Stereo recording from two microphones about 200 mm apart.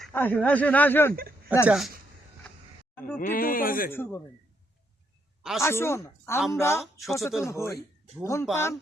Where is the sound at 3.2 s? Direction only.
45° left (ahead or behind).